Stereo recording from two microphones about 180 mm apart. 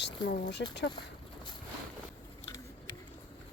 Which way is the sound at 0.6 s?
75° left (ahead or behind).